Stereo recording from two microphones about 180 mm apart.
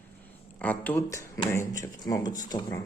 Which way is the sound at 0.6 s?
10° left (ahead or behind).